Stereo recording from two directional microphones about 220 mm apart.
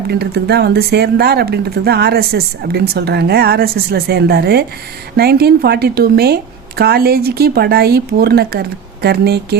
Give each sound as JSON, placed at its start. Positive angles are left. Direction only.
{"t": 0.1, "sound": "speech", "side_deg": -45}